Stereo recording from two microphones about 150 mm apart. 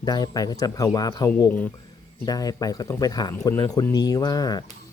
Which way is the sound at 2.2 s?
25° left (ahead or behind).